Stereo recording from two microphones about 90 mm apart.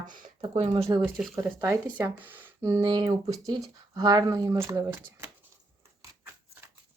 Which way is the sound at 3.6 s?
45° right (ahead or behind).